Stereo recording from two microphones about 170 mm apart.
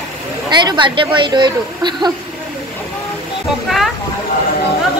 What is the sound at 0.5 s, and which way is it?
Speech, 25° right (ahead or behind).